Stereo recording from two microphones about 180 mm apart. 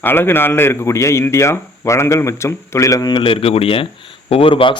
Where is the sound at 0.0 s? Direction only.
10° left (ahead or behind).